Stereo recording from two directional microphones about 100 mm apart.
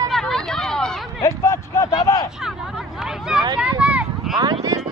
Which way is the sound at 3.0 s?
5° right (ahead or behind).